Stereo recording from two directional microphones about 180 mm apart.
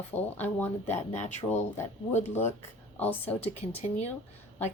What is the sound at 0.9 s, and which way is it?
Speech, 40° left (ahead or behind).